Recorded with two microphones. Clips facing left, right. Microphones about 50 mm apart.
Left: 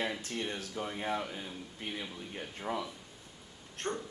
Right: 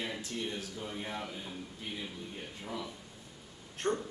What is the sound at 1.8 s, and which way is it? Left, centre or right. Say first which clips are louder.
Speech: left 2 dB; left.